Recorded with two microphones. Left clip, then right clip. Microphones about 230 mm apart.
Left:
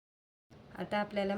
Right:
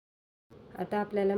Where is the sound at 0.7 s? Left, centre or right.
Left.